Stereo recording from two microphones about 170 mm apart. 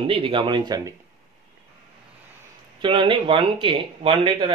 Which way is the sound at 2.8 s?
30° right (ahead or behind).